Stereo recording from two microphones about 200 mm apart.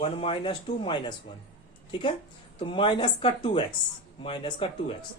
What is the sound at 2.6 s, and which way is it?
Speech, 25° left (ahead or behind).